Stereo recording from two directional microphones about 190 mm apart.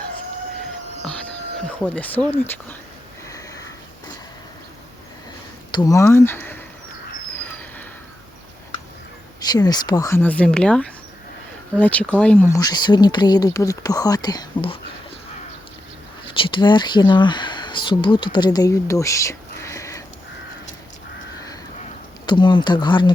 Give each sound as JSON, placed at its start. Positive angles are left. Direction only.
{"t": 1.6, "sound": "speech", "side_deg": 10}
{"t": 3.2, "sound": "sniff", "side_deg": 15}
{"t": 5.7, "sound": "speech", "side_deg": 15}
{"t": 9.5, "sound": "speech", "side_deg": 20}
{"t": 12.5, "sound": "speech", "side_deg": 20}
{"t": 16.3, "sound": "speech", "side_deg": 25}
{"t": 22.3, "sound": "speech", "side_deg": 25}